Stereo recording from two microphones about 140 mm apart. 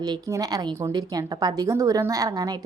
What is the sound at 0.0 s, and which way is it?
A woman's voice, 25° right (ahead or behind).